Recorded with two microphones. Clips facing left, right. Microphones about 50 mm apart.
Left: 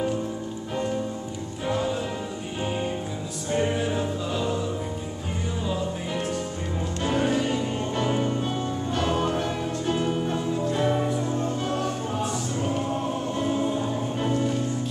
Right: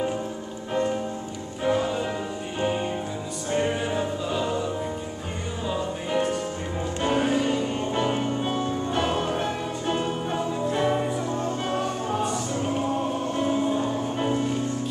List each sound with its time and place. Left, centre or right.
1.6 s music: centre
3.5 s music: centre
5.7 s music: centre
7.9 s music: centre